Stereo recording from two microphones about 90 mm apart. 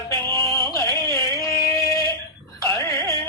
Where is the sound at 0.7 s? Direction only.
35° left (ahead or behind).